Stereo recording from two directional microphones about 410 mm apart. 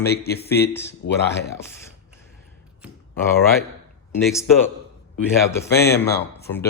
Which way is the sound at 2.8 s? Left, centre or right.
Centre.